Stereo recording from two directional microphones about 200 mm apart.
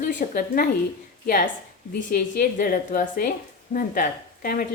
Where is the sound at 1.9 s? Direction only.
45° left (ahead or behind).